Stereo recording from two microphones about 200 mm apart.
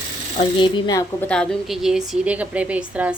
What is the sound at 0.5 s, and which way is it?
Speech, 20° left (ahead or behind).